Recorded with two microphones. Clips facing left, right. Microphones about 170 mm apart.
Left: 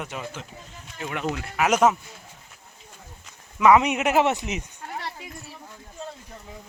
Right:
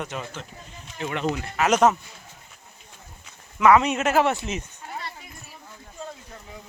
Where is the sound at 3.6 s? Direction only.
15° left (ahead or behind).